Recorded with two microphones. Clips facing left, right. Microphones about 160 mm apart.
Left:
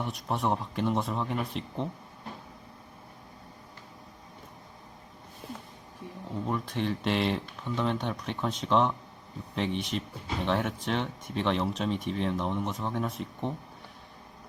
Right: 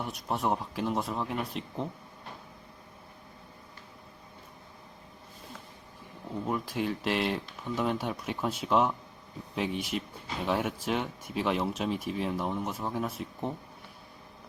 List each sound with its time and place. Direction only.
0.0 s speech: centre (ahead or behind)
6.5 s speech: 5° right (ahead or behind)